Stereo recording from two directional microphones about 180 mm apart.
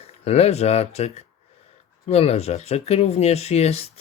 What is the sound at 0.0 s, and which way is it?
Speech, 35° left (ahead or behind).